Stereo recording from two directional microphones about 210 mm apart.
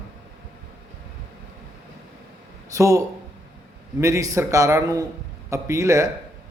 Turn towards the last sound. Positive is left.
turn(degrees=-15)  # may be behind; listen again after turning